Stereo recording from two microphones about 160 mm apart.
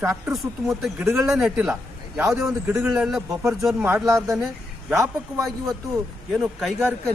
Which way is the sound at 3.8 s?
15° right (ahead or behind).